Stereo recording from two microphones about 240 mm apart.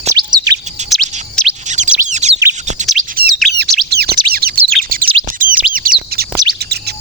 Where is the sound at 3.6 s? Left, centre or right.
Centre.